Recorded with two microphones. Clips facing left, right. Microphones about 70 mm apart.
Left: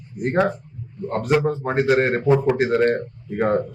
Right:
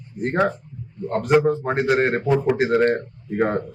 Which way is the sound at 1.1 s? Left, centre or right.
Centre.